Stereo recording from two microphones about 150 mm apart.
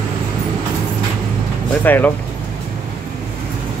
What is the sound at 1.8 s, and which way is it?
Speech, 10° left (ahead or behind).